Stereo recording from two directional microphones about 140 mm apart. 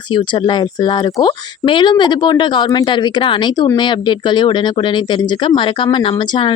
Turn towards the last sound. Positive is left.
turn(degrees=35)  # may be behind; listen again after turning